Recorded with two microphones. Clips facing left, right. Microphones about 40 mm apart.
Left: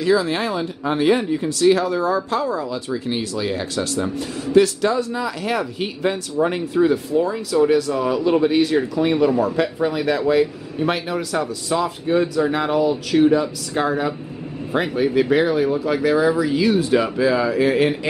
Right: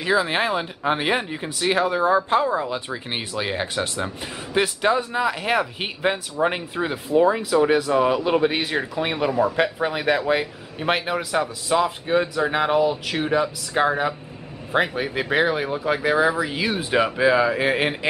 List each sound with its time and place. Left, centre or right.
0.0 s speech: right